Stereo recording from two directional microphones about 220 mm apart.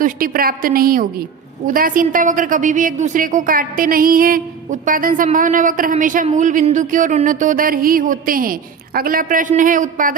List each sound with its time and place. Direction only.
0.0 s a woman's voice: 40° right (ahead or behind)